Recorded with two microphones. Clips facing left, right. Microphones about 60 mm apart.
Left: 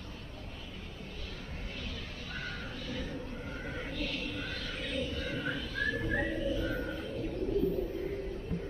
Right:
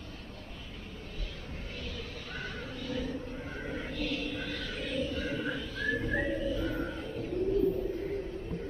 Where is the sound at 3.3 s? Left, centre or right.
Right.